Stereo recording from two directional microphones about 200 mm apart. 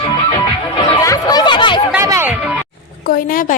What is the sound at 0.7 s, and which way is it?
Chatter, 20° left (ahead or behind).